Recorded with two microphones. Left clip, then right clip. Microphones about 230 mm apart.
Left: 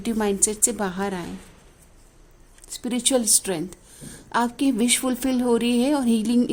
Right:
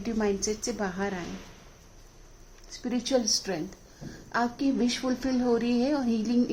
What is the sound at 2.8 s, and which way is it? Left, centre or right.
A woman's voice, left.